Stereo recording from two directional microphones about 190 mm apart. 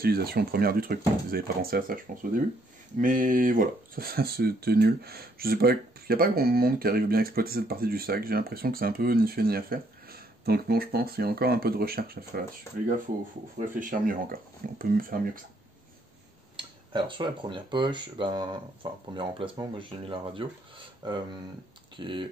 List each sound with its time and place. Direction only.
0.0 s speech: 55° right (ahead or behind)
12.7 s speech: 15° left (ahead or behind)
13.6 s speech: 45° right (ahead or behind)
16.5 s speech: 25° right (ahead or behind)